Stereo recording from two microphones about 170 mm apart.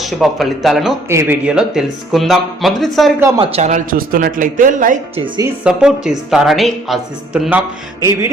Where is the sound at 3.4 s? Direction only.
40° right (ahead or behind).